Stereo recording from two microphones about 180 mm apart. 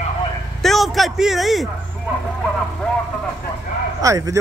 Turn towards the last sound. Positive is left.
turn(degrees=-15)  # may be behind; listen again after turning